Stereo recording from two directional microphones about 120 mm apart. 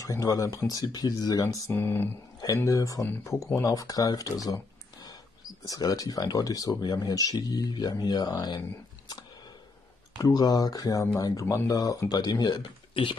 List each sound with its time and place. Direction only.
0.0 s speech: 30° left (ahead or behind)
1.8 s speech: 20° left (ahead or behind); by 9.2 s 35° left (ahead or behind)
10.2 s speech: 35° left (ahead or behind)